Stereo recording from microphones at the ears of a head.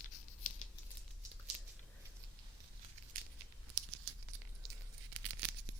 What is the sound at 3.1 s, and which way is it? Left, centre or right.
Tearing, right.